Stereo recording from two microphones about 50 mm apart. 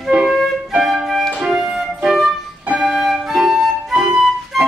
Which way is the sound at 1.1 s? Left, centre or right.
Centre.